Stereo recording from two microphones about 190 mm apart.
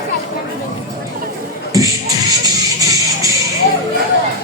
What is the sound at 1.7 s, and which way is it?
Music, 20° right (ahead or behind).